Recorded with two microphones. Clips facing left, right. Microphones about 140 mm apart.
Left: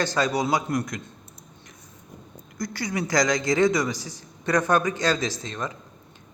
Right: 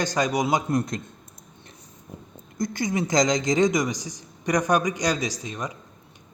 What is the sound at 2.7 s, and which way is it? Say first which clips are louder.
Speech: right 2 dB; 20° right (ahead or behind).